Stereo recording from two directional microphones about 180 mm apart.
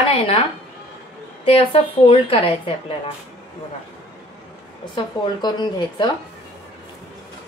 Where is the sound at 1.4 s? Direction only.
30° left (ahead or behind).